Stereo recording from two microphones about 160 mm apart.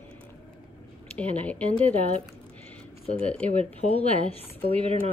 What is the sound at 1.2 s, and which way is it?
Speech, 10° left (ahead or behind).